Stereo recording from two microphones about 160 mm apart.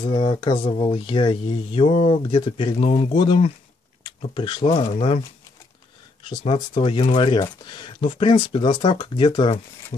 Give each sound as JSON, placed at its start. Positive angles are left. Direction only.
{"t": 0.0, "sound": "speech", "side_deg": 30}
{"t": 4.8, "sound": "speech", "side_deg": 40}
{"t": 6.2, "sound": "speech", "side_deg": 30}